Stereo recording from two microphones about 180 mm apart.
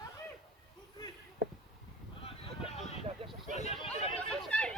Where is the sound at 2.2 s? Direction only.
35° left (ahead or behind).